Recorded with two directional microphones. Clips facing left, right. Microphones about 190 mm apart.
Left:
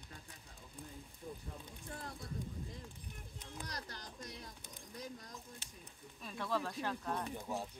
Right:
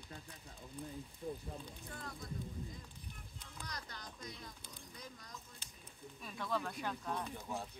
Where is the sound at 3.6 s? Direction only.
40° left (ahead or behind).